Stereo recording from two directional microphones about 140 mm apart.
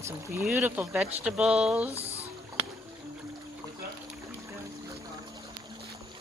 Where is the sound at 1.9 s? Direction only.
45° right (ahead or behind).